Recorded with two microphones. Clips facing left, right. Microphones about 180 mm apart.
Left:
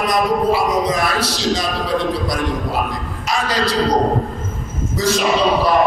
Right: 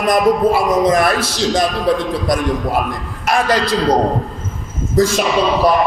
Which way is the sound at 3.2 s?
55° right (ahead or behind).